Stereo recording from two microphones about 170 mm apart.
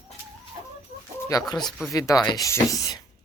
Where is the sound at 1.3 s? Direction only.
25° left (ahead or behind).